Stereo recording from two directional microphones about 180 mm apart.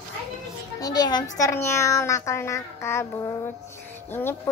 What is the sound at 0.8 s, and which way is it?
A child's voice, 20° left (ahead or behind).